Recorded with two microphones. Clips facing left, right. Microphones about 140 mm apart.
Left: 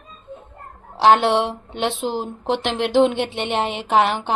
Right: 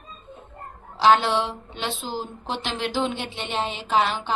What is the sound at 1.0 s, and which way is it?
Speech, 60° left (ahead or behind).